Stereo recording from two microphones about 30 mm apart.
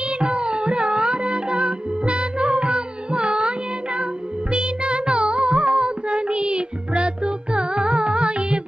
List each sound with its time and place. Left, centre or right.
0.2 s music: right